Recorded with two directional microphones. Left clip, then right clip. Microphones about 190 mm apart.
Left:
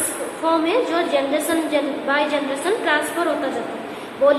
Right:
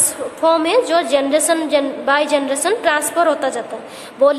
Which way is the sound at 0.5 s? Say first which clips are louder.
Right 5 dB; 50° right (ahead or behind).